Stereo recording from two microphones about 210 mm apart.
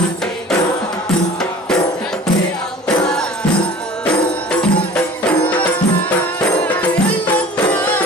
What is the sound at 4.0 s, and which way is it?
Music, 5° left (ahead or behind).